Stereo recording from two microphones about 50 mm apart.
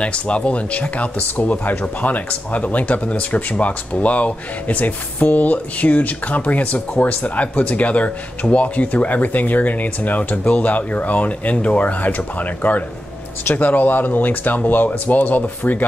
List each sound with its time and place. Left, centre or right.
0.0 s speech: left